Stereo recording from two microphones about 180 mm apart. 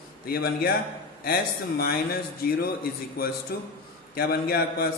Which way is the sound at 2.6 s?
55° left (ahead or behind).